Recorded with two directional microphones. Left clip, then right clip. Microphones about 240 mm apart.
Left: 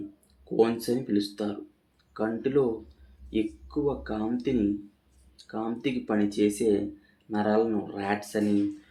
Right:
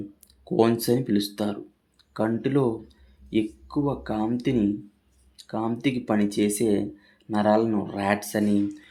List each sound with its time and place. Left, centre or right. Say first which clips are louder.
0.5 s speech: right 3 dB; right